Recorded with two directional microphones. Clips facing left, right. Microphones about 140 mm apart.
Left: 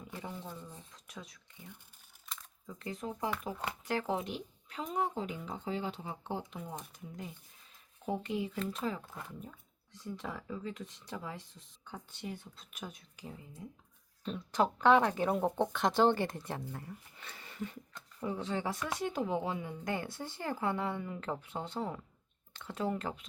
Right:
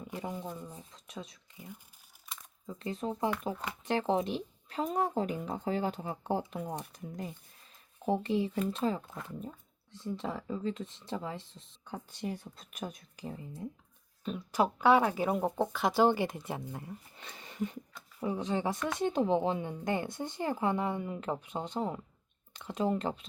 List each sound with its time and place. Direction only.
0.1 s a woman's voice: 15° right (ahead or behind)
2.6 s a woman's voice: 25° right (ahead or behind); by 6.4 s 45° right (ahead or behind)
8.0 s a woman's voice: 30° right (ahead or behind)
12.1 s speech: 45° right (ahead or behind)
14.3 s a woman's voice: 10° right (ahead or behind); by 23.2 s 25° right (ahead or behind)